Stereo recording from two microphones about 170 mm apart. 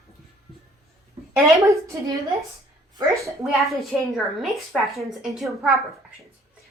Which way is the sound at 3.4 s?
Centre (ahead or behind).